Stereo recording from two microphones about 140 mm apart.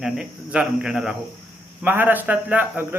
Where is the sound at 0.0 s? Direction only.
5° right (ahead or behind).